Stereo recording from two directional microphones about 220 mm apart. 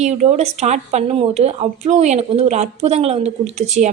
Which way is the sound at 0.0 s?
30° right (ahead or behind).